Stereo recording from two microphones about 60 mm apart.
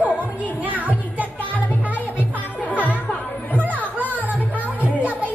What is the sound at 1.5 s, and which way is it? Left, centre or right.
Music, left.